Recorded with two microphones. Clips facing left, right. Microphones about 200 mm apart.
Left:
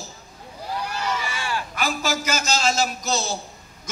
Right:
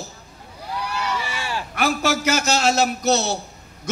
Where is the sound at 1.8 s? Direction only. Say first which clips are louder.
Right 6 dB; 65° right (ahead or behind).